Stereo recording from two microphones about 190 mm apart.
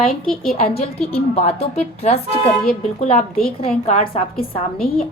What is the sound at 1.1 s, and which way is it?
Speech, 35° left (ahead or behind).